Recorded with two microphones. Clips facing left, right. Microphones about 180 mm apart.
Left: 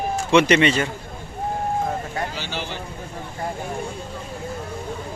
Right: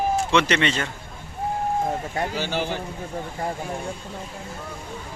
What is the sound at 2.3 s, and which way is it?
Speech, 50° right (ahead or behind).